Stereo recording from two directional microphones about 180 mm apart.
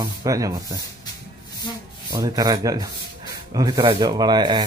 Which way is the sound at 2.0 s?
20° right (ahead or behind).